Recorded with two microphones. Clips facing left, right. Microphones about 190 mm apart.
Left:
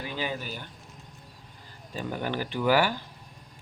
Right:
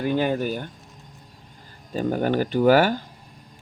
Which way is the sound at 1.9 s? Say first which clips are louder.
Right 9 dB; 45° right (ahead or behind).